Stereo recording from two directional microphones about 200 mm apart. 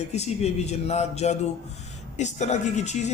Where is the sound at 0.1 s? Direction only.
35° left (ahead or behind).